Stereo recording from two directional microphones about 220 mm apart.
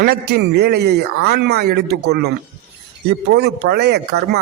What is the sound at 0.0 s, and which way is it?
Speech, 45° right (ahead or behind).